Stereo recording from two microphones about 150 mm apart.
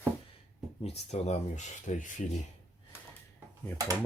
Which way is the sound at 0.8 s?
45° left (ahead or behind).